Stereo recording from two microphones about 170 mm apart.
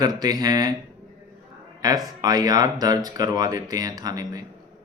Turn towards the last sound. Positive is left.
turn(degrees=-20)  # may be behind; listen again after turning